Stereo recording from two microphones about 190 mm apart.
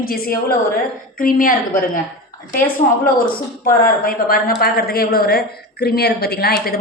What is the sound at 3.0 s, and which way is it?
A woman's voice, 50° left (ahead or behind).